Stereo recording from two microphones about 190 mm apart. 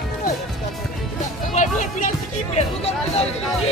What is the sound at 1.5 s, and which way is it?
Music, 40° left (ahead or behind).